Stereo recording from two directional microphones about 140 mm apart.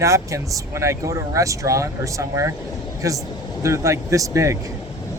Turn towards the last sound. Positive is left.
turn(degrees=-20)  # may be behind; listen again after turning